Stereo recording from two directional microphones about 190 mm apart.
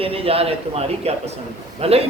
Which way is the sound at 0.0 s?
30° right (ahead or behind).